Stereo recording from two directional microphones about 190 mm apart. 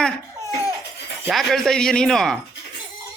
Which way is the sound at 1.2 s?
Centre (ahead or behind).